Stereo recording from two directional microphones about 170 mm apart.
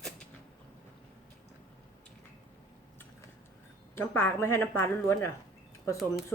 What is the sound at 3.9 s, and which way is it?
Speech, 15° left (ahead or behind).